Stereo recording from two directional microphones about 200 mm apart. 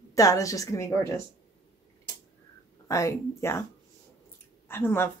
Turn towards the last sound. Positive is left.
turn(degrees=10)  # may be behind; listen again after turning